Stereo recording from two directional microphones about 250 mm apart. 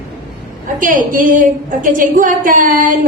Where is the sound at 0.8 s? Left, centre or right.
Right.